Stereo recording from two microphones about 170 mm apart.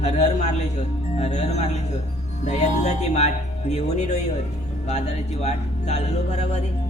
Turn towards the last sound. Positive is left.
turn(degrees=40)  # may be behind; listen again after turning